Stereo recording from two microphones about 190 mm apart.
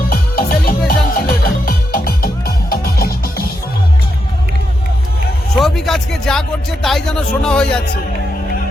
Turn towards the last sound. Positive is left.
turn(degrees=5)  # may be behind; listen again after turning